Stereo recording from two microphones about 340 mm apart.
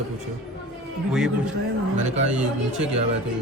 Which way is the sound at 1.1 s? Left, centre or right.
Centre.